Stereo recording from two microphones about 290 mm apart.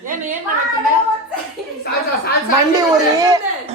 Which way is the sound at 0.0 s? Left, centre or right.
Right.